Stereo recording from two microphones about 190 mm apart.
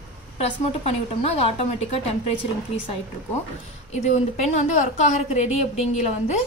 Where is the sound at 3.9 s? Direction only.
35° left (ahead or behind).